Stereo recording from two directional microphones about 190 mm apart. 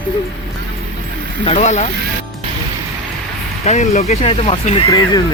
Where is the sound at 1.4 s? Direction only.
35° left (ahead or behind).